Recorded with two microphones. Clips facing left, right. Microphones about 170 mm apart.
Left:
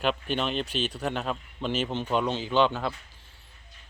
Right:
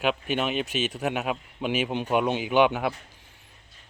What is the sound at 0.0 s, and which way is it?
Speech, 5° right (ahead or behind).